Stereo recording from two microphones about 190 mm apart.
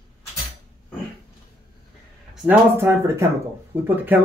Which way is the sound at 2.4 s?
10° right (ahead or behind).